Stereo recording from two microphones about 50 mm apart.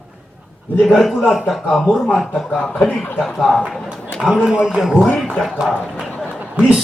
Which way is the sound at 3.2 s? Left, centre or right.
Centre.